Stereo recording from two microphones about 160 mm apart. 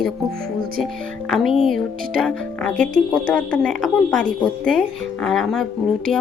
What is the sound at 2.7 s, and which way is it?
Speech, 55° right (ahead or behind).